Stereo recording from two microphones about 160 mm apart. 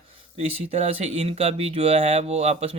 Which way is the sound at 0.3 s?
40° right (ahead or behind).